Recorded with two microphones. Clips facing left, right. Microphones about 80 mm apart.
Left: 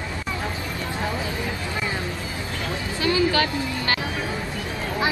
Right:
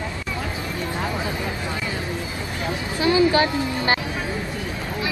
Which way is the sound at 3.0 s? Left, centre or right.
Right.